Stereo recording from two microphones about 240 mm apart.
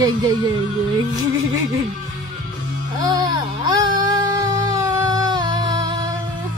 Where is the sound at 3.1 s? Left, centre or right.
Centre.